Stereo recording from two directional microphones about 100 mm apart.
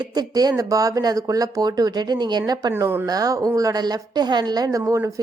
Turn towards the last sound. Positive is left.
turn(degrees=-30)  # may be behind; listen again after turning